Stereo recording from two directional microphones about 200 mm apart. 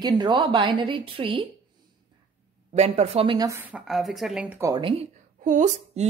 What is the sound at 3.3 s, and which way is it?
Speech, 15° right (ahead or behind).